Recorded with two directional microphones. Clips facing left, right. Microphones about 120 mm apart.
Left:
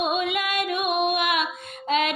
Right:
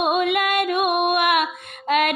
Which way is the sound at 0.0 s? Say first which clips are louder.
Right 5 dB; 55° right (ahead or behind).